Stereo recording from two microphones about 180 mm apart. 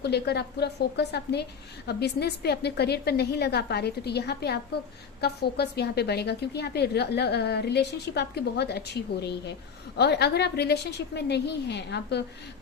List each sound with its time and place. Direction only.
0.0 s a woman's voice: 65° left (ahead or behind)